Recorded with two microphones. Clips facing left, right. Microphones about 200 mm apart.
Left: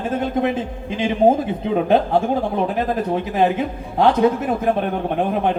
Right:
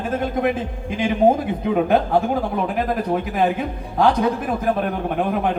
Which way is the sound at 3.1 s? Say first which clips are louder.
Left 2 dB; 25° left (ahead or behind).